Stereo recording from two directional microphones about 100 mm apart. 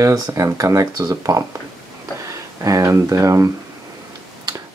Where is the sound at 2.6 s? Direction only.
30° right (ahead or behind).